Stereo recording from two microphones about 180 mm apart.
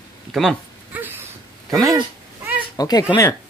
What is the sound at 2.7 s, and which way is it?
Speech, 20° left (ahead or behind).